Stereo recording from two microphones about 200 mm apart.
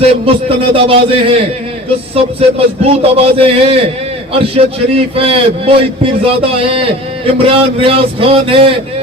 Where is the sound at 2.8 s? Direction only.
30° right (ahead or behind).